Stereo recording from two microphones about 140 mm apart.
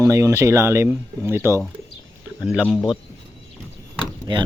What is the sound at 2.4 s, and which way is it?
Speech, centre (ahead or behind).